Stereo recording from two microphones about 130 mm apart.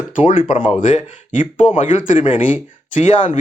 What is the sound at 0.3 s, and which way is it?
Speech, 75° left (ahead or behind).